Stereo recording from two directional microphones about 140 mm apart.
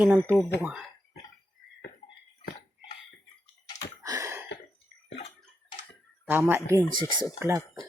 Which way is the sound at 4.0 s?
25° right (ahead or behind).